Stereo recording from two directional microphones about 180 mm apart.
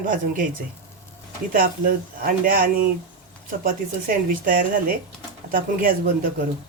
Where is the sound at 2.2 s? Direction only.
50° right (ahead or behind).